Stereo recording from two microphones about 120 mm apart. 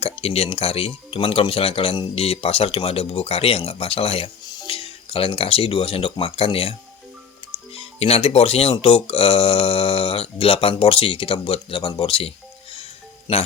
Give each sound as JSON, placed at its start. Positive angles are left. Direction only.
{"t": 0.0, "sound": "speech", "side_deg": 55}
{"t": 12.7, "sound": "music", "side_deg": 55}